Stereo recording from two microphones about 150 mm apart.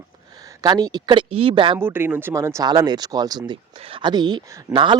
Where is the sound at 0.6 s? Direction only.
25° right (ahead or behind).